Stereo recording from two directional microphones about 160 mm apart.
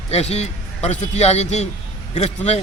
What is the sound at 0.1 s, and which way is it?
A man's voice, 40° left (ahead or behind).